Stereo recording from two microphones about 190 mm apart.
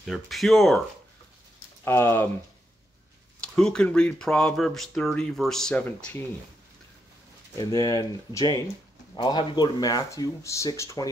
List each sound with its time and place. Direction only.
0.0 s speech: centre (ahead or behind)
1.9 s speech: 15° left (ahead or behind)
3.3 s speech: 5° left (ahead or behind)
7.5 s speech: 20° left (ahead or behind)